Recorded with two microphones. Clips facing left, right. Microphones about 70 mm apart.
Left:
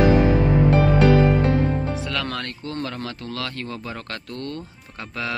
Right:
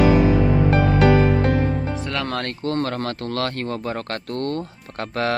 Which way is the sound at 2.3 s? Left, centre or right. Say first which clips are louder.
Right 6 dB; right.